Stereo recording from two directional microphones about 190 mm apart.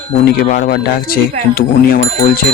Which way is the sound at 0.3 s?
50° left (ahead or behind).